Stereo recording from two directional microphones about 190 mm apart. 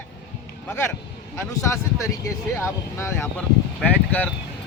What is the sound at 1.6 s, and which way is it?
Speech, 15° left (ahead or behind).